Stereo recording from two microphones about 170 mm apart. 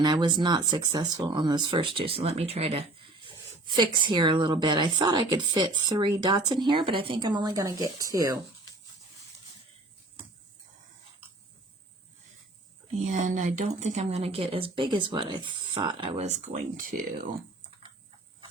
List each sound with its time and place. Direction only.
0.0 s speech: 25° right (ahead or behind)
13.0 s speech: 45° right (ahead or behind)